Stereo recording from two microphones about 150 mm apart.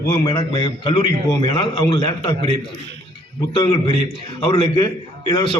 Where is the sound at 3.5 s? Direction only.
40° left (ahead or behind).